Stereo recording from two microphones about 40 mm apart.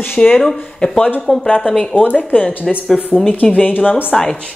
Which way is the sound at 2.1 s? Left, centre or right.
Left.